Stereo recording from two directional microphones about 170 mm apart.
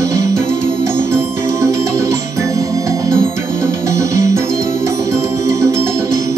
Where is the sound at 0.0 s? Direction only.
20° right (ahead or behind).